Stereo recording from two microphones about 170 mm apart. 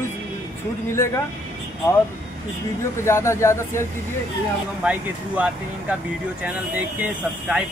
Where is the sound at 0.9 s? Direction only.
15° left (ahead or behind).